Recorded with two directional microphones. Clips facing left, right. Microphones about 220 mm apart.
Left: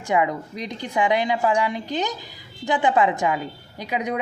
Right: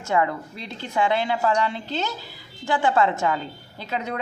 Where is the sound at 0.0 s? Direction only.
15° left (ahead or behind).